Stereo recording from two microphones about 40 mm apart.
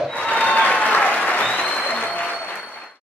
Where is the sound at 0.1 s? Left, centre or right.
Left.